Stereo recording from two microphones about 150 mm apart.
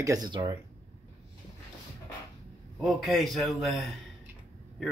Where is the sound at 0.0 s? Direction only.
25° right (ahead or behind).